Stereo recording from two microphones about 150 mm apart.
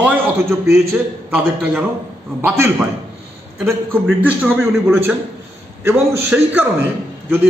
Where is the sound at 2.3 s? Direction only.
15° right (ahead or behind).